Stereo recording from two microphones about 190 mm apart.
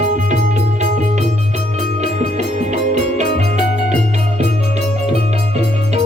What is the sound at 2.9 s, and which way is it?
Music, 35° right (ahead or behind).